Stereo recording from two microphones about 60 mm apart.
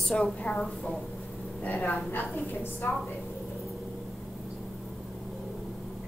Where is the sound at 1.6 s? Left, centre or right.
Left.